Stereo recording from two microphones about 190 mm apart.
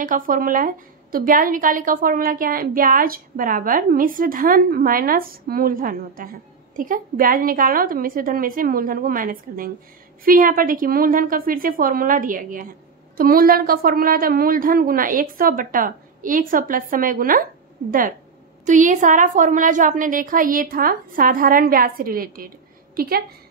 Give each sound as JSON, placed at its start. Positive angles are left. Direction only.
{"t": 0.0, "sound": "a woman's voice", "side_deg": -45}
{"t": 18.7, "sound": "a woman's voice", "side_deg": -40}